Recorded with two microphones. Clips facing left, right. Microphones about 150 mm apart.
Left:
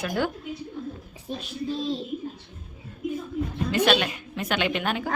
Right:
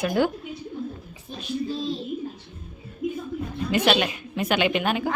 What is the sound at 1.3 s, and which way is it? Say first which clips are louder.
Speech: left 5 dB; 90° left.